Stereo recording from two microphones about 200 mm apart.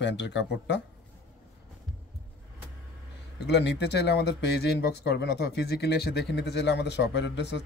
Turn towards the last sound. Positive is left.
turn(degrees=60)  # may be behind; listen again after turning